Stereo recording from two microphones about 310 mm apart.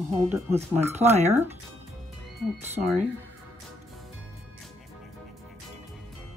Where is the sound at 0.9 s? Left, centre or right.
Right.